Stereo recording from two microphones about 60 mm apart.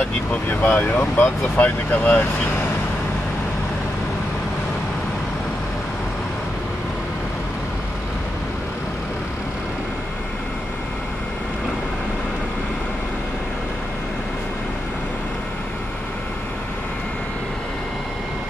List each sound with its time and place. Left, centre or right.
0.3 s speech: left